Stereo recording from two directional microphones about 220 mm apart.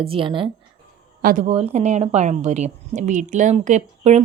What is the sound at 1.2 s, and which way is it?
Speech, 40° right (ahead or behind).